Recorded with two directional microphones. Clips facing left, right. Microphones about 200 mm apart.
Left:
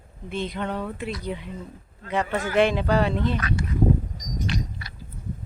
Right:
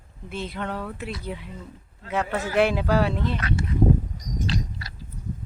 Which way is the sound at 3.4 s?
25° right (ahead or behind).